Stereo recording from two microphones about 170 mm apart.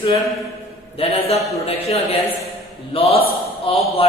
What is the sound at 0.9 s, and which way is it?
A man's voice, 35° left (ahead or behind).